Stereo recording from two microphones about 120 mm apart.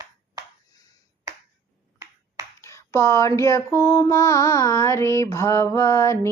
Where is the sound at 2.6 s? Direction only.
25° left (ahead or behind).